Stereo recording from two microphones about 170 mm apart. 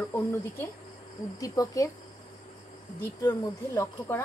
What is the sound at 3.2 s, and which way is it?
A woman's voice, 20° left (ahead or behind).